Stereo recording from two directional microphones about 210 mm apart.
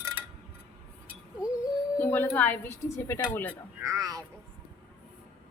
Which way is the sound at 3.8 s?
15° right (ahead or behind).